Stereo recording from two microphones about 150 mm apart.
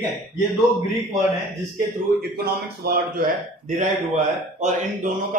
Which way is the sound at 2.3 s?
90° right.